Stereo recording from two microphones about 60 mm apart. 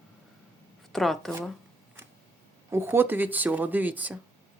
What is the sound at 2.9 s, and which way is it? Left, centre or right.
Speech, right.